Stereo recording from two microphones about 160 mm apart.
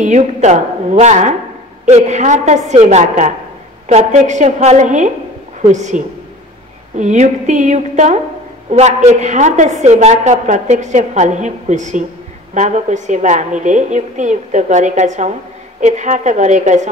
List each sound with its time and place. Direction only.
0.0 s a woman's voice: 45° right (ahead or behind)